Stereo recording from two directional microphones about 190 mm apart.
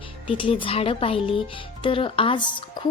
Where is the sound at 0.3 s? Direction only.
25° left (ahead or behind).